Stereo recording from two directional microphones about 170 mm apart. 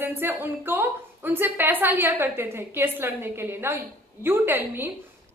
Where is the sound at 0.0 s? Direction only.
10° right (ahead or behind).